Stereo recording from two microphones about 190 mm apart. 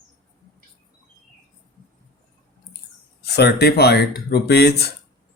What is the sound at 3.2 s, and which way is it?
Speech, 60° left (ahead or behind).